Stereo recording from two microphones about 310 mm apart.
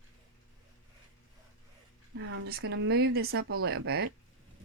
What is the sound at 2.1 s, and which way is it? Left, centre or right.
Speech, right.